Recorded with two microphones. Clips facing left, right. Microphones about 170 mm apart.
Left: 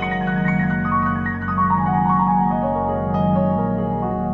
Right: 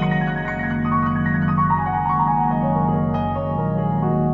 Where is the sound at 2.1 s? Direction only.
Centre (ahead or behind).